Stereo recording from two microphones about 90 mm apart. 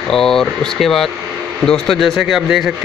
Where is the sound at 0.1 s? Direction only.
5° left (ahead or behind).